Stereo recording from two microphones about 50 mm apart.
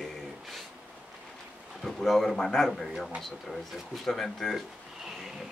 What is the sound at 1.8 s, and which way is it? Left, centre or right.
Speech, centre.